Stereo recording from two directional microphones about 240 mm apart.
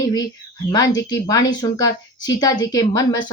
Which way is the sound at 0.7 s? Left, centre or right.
Centre.